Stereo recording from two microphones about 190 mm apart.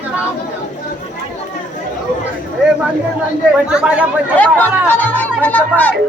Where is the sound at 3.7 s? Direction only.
5° right (ahead or behind).